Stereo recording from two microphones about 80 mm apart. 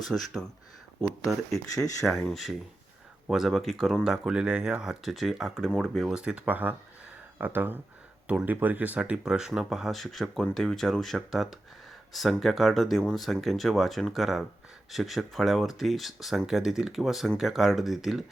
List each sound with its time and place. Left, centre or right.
0.1 s speech: centre
1.7 s speech: left
3.2 s speech: centre